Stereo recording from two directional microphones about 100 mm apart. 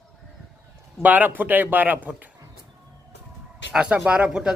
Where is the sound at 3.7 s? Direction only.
10° right (ahead or behind).